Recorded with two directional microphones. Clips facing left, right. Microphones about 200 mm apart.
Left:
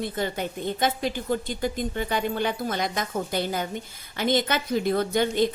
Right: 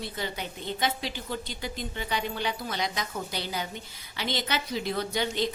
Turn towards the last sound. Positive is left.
turn(degrees=50)  # may be behind; listen again after turning